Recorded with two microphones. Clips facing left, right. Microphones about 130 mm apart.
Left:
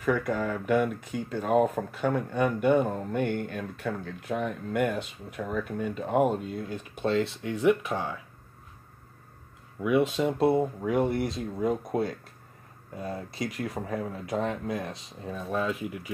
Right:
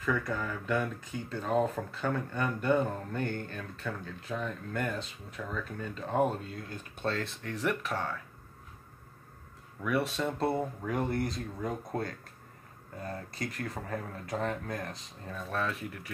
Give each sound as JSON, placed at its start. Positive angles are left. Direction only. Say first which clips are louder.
{"t": 0.0, "sound": "speech", "louder": "left 5 dB", "side_deg": 20}
{"t": 9.8, "sound": "speech", "louder": "left 6 dB", "side_deg": 15}
{"t": 10.3, "sound": "speech", "louder": "left 7 dB", "side_deg": 5}